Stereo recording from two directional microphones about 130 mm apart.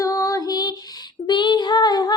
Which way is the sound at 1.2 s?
35° left (ahead or behind).